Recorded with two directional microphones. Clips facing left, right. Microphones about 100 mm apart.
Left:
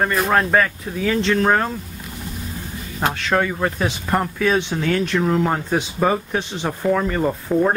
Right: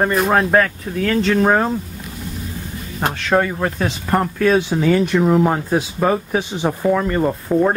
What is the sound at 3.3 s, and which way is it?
Speech, 10° right (ahead or behind).